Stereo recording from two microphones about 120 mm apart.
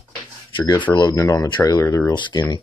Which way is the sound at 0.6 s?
40° left (ahead or behind).